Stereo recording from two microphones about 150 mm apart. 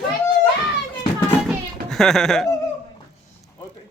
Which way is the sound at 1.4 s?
5° left (ahead or behind).